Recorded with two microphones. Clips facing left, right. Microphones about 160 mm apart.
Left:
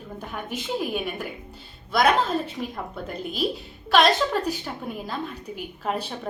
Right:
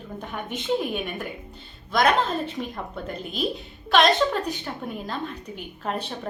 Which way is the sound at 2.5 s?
5° left (ahead or behind).